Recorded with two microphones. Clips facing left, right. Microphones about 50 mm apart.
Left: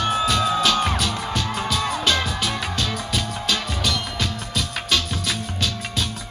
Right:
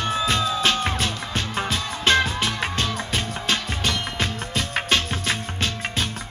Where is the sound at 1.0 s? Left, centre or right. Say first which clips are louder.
Left 2 dB; right.